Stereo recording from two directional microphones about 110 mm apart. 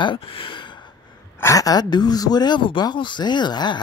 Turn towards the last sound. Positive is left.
turn(degrees=40)  # may be behind; listen again after turning